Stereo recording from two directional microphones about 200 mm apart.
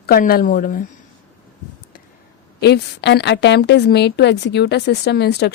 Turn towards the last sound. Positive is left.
turn(degrees=55)  # may be behind; listen again after turning